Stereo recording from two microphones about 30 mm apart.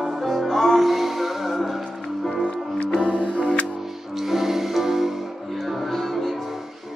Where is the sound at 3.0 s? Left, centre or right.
Right.